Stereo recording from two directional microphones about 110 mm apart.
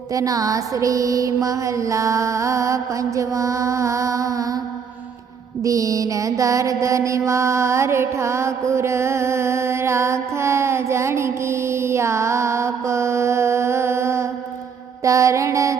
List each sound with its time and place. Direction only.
0.1 s mantra: 30° right (ahead or behind)
5.6 s mantra: 30° right (ahead or behind)